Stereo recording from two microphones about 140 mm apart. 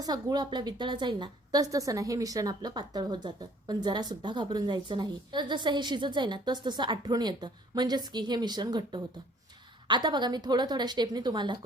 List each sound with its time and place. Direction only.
0.0 s a woman's voice: 30° right (ahead or behind)